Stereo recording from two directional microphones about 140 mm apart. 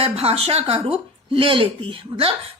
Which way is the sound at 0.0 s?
45° right (ahead or behind).